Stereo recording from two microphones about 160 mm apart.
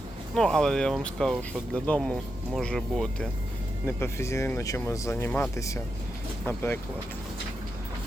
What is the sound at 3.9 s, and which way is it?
Speech, 15° left (ahead or behind).